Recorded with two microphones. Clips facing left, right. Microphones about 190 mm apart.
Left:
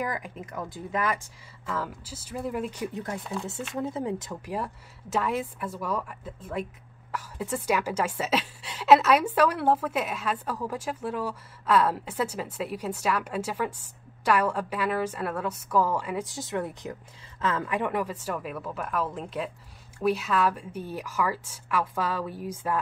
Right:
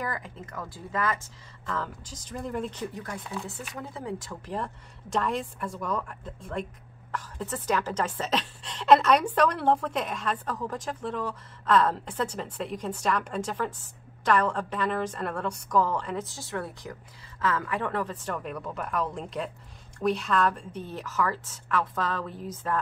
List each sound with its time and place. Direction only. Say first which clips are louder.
0.0 s a woman's voice: left 2 dB; 15° left (ahead or behind)
2.9 s speech: left 3 dB; 25° left (ahead or behind)
5.1 s a woman's voice: left 1 dB; 5° left (ahead or behind)